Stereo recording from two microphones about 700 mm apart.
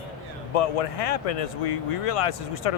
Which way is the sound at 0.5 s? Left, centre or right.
Left.